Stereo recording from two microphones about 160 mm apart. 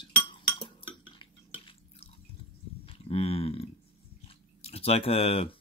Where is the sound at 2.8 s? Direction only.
35° left (ahead or behind).